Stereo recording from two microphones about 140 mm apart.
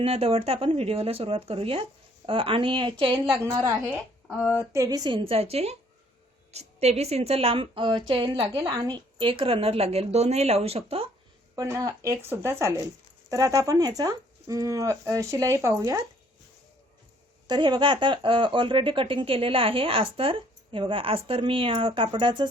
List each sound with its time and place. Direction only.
0.0 s speech: 45° right (ahead or behind)
3.4 s speech: 25° right (ahead or behind); by 11.1 s 45° right (ahead or behind)
11.5 s speech: 25° right (ahead or behind)
17.5 s speech: 35° right (ahead or behind)